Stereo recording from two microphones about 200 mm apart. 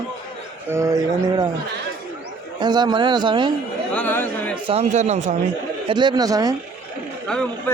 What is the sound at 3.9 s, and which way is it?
Chatter, 10° left (ahead or behind).